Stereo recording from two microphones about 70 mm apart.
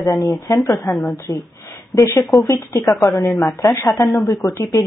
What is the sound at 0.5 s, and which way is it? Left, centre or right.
Speech, left.